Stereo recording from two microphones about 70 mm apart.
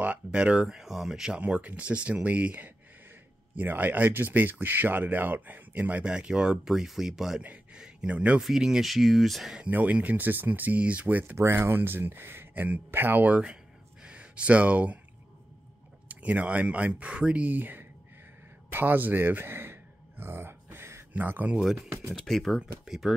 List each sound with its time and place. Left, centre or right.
0.0 s speech: centre
7.4 s speech: right
8.4 s speech: centre
9.6 s speech: right
11.3 s speech: right; by 15.0 s centre
16.1 s speech: right
18.7 s a sound: right
21.1 s speech: right
21.7 s speech: right
22.1 s speech: centre